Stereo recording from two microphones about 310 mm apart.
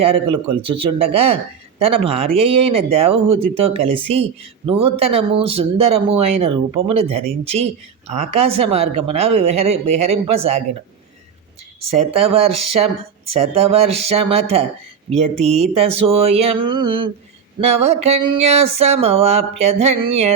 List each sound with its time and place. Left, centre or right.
0.0 s speech: centre
11.9 s speech: centre